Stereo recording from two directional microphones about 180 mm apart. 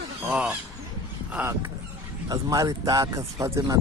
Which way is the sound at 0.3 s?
5° right (ahead or behind).